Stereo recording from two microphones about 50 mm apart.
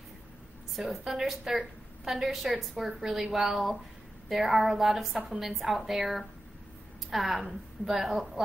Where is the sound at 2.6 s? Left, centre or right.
Centre.